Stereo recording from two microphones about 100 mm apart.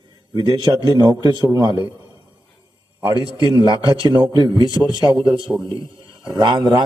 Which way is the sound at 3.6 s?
50° right (ahead or behind).